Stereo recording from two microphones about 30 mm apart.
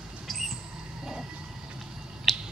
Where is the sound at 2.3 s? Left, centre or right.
Centre.